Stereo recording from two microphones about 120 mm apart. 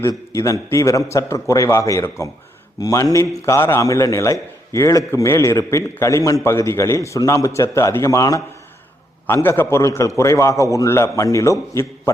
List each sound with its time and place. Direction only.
0.1 s a man's voice: 30° left (ahead or behind)